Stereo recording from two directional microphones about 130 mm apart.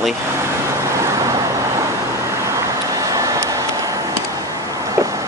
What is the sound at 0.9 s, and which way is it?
Vehicle, 25° right (ahead or behind).